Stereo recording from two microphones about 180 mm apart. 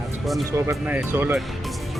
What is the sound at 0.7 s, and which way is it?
Speech, 5° right (ahead or behind).